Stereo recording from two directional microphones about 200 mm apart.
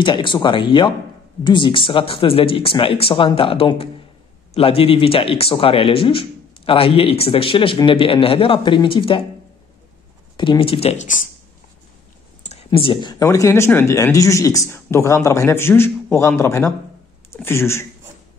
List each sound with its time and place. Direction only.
0.0 s speech: 25° left (ahead or behind)
10.3 s speech: 25° left (ahead or behind)
12.4 s speech: 30° left (ahead or behind); by 17.8 s 10° left (ahead or behind)